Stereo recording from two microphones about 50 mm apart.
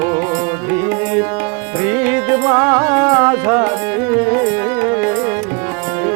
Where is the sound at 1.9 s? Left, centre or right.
Right.